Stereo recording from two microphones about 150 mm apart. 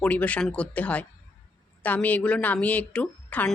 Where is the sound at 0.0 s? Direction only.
10° left (ahead or behind).